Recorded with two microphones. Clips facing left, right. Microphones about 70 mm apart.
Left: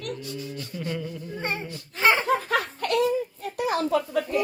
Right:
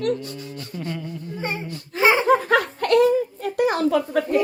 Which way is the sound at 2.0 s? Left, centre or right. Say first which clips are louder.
Right 3 dB; centre.